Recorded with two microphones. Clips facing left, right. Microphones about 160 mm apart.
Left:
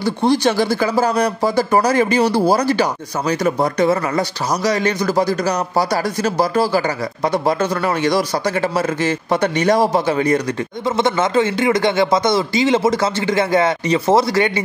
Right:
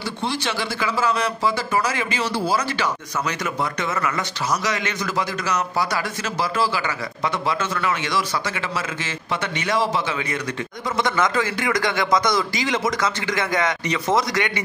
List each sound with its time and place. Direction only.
0.0 s speech: 40° left (ahead or behind)
11.0 s speech: 25° left (ahead or behind)